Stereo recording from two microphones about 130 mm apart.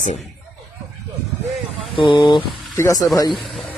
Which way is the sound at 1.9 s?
40° left (ahead or behind).